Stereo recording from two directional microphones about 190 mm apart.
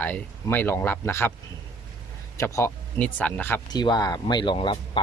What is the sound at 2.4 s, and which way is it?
Speech, 15° left (ahead or behind).